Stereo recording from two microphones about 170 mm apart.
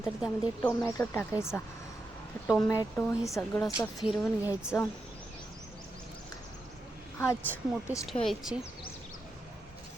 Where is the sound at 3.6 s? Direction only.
Centre (ahead or behind).